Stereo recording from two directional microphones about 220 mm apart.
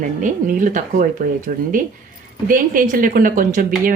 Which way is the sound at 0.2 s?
35° right (ahead or behind).